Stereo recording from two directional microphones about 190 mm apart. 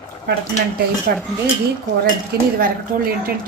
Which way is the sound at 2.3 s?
55° right (ahead or behind).